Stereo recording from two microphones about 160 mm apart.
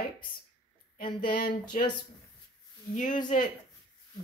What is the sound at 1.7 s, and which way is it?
Speech, 55° left (ahead or behind).